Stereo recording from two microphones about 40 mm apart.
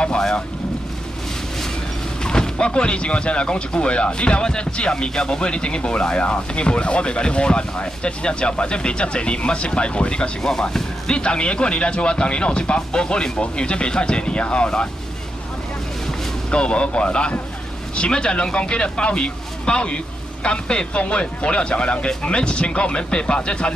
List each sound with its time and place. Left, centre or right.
2.2 s speech: left
16.4 s speech: left